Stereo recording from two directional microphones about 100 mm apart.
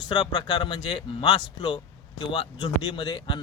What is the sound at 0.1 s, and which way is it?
Speech, 50° left (ahead or behind).